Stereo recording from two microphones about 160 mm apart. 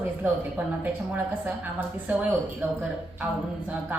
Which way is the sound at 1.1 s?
10° right (ahead or behind).